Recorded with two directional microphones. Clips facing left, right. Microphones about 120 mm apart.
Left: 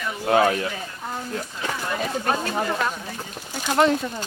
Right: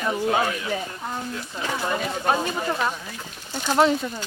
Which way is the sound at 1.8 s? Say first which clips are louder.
Right 1 dB; 15° right (ahead or behind).